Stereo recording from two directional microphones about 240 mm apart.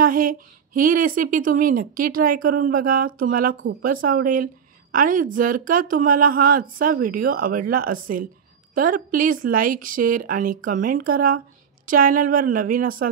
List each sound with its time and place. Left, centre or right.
0.0 s speech: right